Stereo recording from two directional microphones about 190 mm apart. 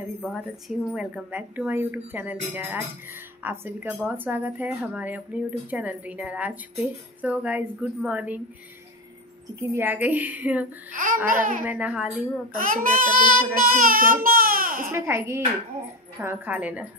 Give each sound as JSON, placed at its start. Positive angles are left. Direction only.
{"t": 0.3, "sound": "speech", "side_deg": -5}
{"t": 9.6, "sound": "speech", "side_deg": -10}
{"t": 10.9, "sound": "a child's voice", "side_deg": -45}
{"t": 11.6, "sound": "speech", "side_deg": -5}
{"t": 12.5, "sound": "a child's voice", "side_deg": -45}
{"t": 15.0, "sound": "speech", "side_deg": -15}